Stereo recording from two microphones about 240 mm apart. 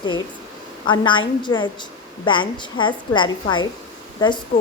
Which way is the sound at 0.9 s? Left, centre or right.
Centre.